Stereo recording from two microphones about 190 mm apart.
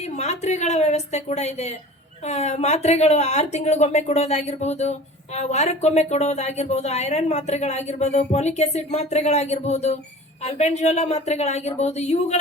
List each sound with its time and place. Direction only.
0.0 s speech: 35° left (ahead or behind)